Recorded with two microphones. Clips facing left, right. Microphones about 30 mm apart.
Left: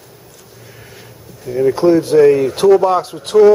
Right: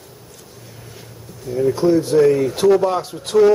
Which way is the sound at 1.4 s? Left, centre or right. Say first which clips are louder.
Left 4 dB; left.